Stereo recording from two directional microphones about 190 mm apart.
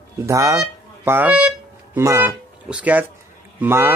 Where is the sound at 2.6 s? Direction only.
5° right (ahead or behind).